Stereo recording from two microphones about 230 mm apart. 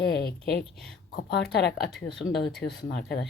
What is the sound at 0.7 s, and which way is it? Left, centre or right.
Speech, centre.